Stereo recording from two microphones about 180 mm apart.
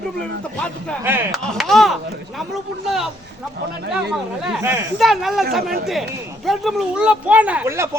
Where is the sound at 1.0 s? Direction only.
10° right (ahead or behind).